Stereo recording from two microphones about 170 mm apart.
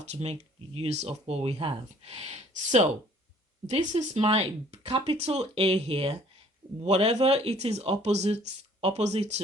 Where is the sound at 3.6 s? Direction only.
40° right (ahead or behind).